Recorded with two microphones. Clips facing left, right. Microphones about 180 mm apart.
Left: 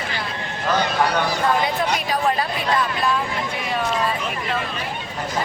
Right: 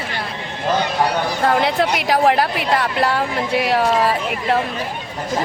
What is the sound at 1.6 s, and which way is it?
A woman's voice, 75° right (ahead or behind).